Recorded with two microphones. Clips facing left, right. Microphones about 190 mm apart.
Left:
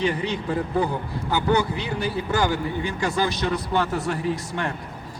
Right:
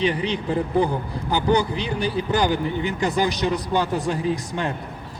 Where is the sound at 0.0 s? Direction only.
20° right (ahead or behind).